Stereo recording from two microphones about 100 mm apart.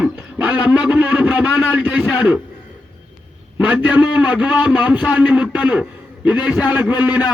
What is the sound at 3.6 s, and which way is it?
A man's voice, 15° right (ahead or behind).